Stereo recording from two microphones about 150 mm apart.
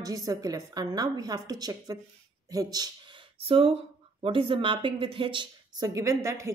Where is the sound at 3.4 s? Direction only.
40° right (ahead or behind); by 6.5 s 20° right (ahead or behind).